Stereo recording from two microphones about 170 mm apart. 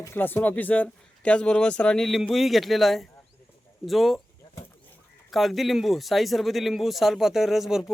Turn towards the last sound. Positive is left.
turn(degrees=0)  # may be behind; listen again after turning